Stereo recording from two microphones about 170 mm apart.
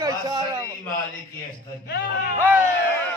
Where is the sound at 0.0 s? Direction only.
20° right (ahead or behind).